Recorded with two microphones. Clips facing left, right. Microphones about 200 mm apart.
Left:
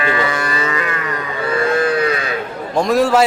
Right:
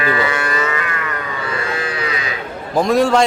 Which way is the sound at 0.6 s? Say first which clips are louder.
Even; 30° left (ahead or behind).